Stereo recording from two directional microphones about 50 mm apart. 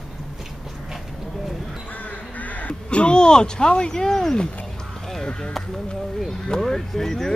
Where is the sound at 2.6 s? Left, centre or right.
Left.